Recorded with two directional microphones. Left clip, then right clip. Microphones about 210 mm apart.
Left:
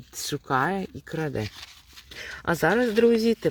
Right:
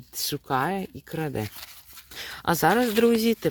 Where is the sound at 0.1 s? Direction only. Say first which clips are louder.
Left 1 dB; 5° right (ahead or behind).